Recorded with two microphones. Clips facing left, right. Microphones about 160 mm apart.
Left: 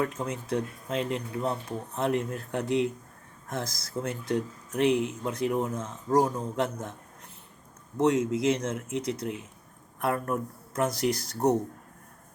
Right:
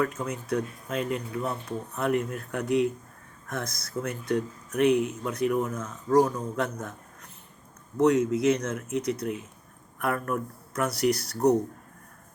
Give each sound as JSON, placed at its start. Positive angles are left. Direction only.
{"t": 0.0, "sound": "speech", "side_deg": 25}
{"t": 7.9, "sound": "speech", "side_deg": 30}